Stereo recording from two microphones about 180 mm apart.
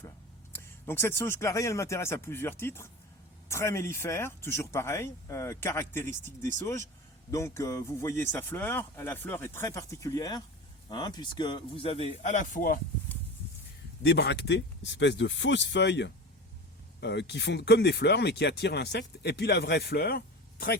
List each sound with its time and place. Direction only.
0.5 s speech: 15° left (ahead or behind); by 12.8 s 50° left (ahead or behind)
14.0 s speech: 65° left (ahead or behind)